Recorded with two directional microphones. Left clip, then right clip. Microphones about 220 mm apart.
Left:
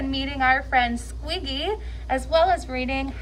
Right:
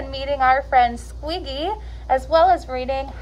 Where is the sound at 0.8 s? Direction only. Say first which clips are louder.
Right 4 dB; 40° right (ahead or behind).